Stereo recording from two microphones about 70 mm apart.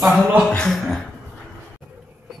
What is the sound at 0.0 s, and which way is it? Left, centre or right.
Speech, centre.